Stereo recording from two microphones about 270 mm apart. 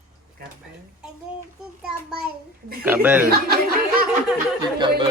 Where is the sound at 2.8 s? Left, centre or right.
Centre.